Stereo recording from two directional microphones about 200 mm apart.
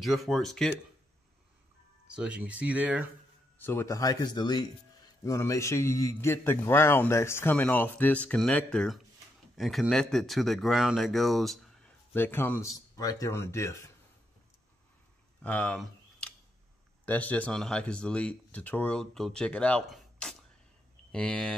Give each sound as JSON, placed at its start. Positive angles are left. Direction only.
{"t": 0.0, "sound": "speech", "side_deg": 0}
{"t": 2.1, "sound": "speech", "side_deg": -5}
{"t": 3.6, "sound": "a man's voice", "side_deg": 15}
{"t": 15.4, "sound": "speech", "side_deg": 5}